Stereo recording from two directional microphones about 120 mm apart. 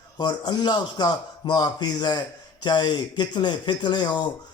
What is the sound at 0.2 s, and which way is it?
Speech, 35° left (ahead or behind).